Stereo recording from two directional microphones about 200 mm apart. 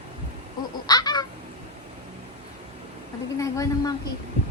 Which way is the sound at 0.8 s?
20° left (ahead or behind).